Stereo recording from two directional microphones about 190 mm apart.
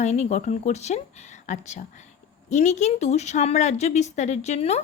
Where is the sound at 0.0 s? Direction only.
35° left (ahead or behind).